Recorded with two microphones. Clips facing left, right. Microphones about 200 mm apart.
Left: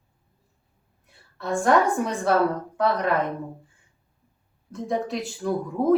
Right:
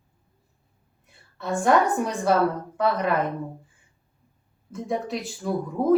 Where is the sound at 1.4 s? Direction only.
Centre (ahead or behind).